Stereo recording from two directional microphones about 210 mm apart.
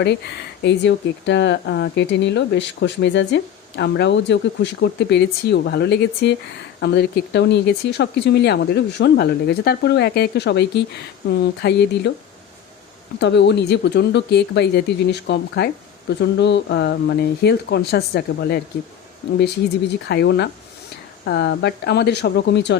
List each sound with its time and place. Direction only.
0.6 s speech: 55° left (ahead or behind)
13.1 s speech: 55° left (ahead or behind)
20.1 s speech: 55° left (ahead or behind)